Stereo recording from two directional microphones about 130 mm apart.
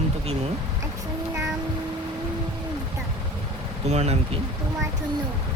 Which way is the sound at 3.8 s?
55° right (ahead or behind).